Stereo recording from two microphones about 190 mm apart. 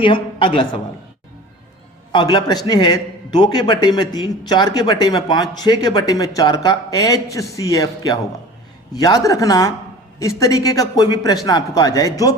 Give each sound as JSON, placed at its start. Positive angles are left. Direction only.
{"t": 0.0, "sound": "a man's voice", "side_deg": 25}
{"t": 2.1, "sound": "a man's voice", "side_deg": 20}